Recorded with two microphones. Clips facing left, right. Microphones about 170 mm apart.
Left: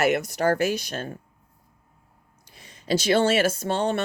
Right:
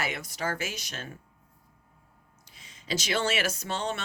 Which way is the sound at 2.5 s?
60° left (ahead or behind).